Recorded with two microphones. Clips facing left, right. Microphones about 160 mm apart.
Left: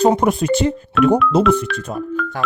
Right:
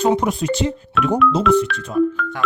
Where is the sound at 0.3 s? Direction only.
55° left (ahead or behind).